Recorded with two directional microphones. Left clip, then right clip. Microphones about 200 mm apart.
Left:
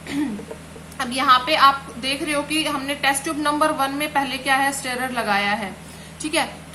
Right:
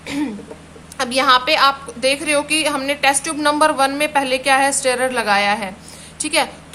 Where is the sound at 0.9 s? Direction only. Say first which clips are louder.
Right 3 dB; 55° right (ahead or behind).